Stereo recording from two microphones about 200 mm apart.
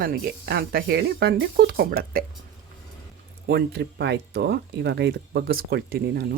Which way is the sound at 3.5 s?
55° right (ahead or behind).